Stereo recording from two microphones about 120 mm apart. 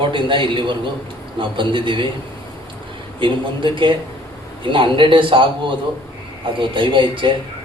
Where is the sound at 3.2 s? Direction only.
45° right (ahead or behind).